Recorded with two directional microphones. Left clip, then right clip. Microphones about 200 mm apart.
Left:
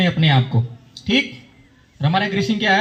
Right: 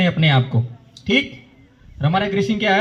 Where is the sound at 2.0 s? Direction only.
25° right (ahead or behind).